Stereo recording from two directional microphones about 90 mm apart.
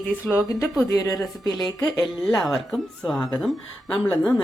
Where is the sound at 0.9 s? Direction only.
40° left (ahead or behind).